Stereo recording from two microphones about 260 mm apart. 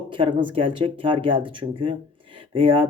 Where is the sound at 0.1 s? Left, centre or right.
Centre.